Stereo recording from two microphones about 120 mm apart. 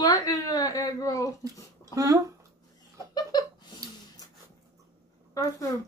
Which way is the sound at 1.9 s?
30° right (ahead or behind).